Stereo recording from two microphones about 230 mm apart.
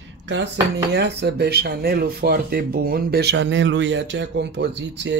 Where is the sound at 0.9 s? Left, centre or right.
Right.